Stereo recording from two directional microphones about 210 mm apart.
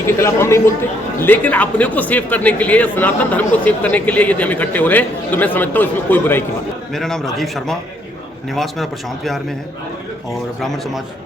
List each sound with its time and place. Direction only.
0.2 s a man's voice: 10° left (ahead or behind)
10.6 s a man's voice: centre (ahead or behind)